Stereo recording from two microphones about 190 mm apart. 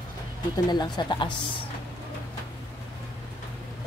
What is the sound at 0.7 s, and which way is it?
Speech, 25° left (ahead or behind).